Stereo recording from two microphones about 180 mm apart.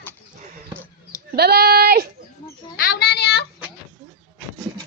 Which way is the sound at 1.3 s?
65° right (ahead or behind).